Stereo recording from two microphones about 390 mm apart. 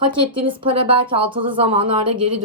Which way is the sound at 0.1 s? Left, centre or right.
Centre.